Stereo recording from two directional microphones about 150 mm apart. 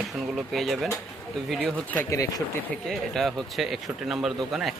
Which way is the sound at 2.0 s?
20° left (ahead or behind).